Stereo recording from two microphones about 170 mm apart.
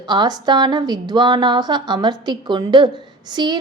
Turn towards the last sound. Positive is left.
turn(degrees=-25)  # may be behind; listen again after turning